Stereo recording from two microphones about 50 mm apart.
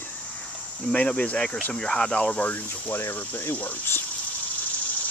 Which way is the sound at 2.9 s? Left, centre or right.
Left.